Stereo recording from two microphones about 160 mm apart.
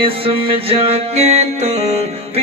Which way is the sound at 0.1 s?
35° right (ahead or behind).